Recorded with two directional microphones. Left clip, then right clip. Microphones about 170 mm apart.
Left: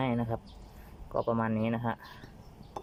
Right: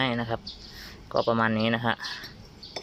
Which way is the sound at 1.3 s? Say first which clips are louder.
Right 7 dB; centre (ahead or behind).